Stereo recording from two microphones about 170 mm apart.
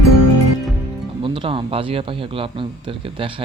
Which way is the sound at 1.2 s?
30° right (ahead or behind).